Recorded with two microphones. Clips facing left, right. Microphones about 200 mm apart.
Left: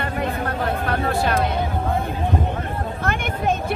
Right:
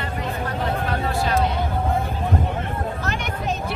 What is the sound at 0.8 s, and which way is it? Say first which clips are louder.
Speech: left 2 dB; 55° left (ahead or behind).